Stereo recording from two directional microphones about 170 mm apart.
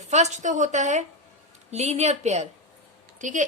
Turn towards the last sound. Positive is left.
turn(degrees=-50)  # may be behind; listen again after turning